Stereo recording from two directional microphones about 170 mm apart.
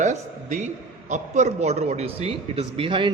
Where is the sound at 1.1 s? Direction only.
45° right (ahead or behind).